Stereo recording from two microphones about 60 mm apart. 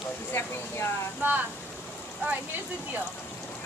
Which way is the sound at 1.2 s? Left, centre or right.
Right.